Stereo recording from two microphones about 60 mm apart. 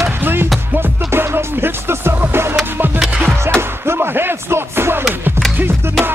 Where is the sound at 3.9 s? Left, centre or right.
Right.